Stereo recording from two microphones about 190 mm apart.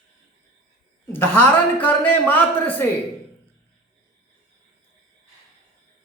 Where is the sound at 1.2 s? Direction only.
10° left (ahead or behind).